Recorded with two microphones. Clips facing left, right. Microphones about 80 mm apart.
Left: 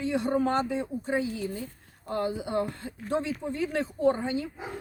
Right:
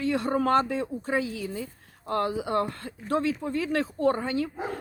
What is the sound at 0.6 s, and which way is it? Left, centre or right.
Speech, right.